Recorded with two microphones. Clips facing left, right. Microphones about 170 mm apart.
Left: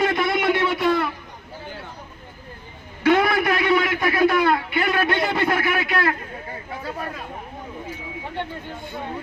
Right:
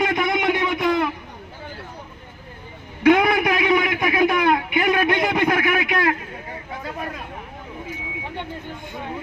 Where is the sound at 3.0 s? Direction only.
15° right (ahead or behind).